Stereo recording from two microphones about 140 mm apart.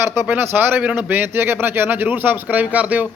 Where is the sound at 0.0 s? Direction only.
20° right (ahead or behind).